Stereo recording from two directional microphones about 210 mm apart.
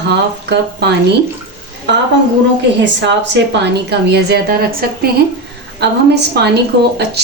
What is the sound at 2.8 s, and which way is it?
A woman's voice, 55° right (ahead or behind).